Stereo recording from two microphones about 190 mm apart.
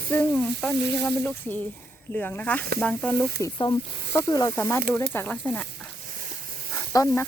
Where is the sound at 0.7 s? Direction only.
60° right (ahead or behind).